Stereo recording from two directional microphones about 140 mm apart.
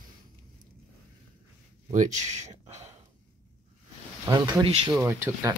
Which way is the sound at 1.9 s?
60° right (ahead or behind).